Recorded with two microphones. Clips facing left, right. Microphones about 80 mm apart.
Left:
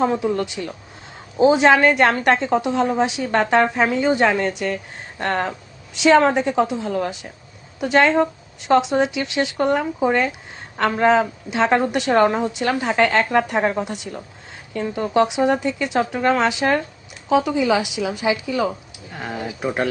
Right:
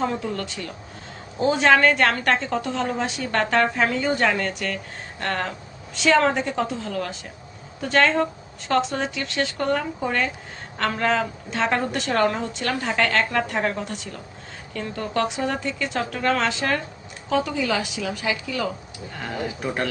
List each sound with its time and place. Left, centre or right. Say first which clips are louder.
0.0 s a woman's voice: left 6 dB; centre
19.1 s a woman's voice: left 1 dB; centre